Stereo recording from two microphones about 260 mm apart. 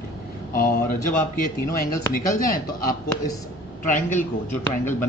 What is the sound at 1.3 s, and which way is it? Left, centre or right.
Speech, left.